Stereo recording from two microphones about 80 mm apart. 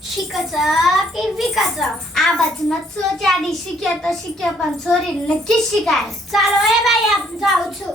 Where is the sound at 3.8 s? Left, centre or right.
Centre.